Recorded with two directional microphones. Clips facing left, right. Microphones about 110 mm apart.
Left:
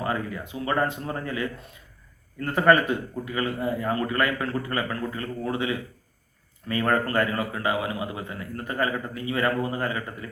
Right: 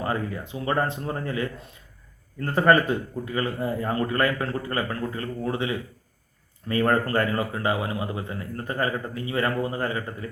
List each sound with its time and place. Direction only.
0.0 s a man's voice: 30° right (ahead or behind)